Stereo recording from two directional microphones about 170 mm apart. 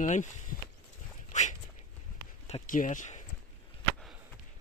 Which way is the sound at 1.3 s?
45° left (ahead or behind).